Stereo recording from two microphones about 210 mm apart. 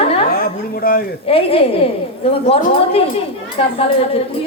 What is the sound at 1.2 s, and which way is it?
Speech, 25° left (ahead or behind).